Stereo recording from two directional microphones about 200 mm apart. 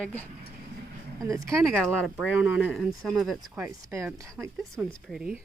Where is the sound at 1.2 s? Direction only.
15° right (ahead or behind).